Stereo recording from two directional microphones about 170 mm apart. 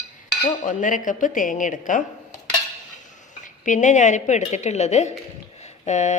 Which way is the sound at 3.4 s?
45° left (ahead or behind).